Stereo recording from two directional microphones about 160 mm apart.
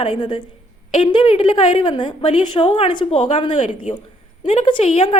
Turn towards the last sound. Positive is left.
turn(degrees=35)  # may be behind; listen again after turning